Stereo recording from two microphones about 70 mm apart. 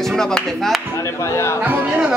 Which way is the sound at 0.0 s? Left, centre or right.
Centre.